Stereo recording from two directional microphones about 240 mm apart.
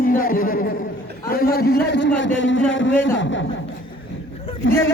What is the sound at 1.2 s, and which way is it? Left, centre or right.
A man's voice, left.